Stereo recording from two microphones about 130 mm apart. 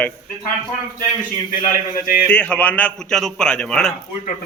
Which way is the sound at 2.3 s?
10° left (ahead or behind).